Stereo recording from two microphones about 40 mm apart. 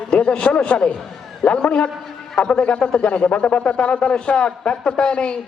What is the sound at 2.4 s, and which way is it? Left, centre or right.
A man's voice, left.